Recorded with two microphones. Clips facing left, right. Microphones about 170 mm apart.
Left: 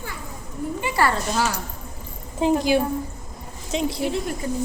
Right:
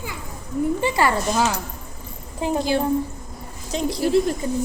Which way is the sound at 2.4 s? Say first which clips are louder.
Left 4 dB; 20° left (ahead or behind).